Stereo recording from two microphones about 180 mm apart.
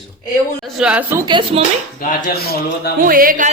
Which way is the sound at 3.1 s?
50° right (ahead or behind).